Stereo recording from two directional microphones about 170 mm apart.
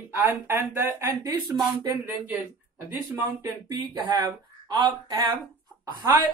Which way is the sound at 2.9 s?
15° right (ahead or behind).